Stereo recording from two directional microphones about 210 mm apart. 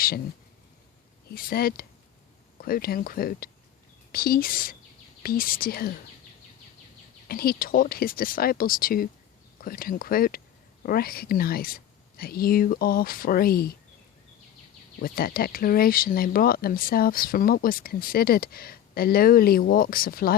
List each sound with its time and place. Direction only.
1.3 s speech: 45° left (ahead or behind)
7.3 s speech: 45° left (ahead or behind)
15.0 s speech: 45° left (ahead or behind)